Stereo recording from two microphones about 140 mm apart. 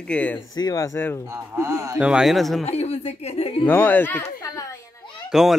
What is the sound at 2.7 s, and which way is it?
Speech, 50° left (ahead or behind).